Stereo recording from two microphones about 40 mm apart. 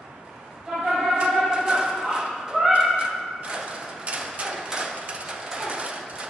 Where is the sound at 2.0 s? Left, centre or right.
Centre.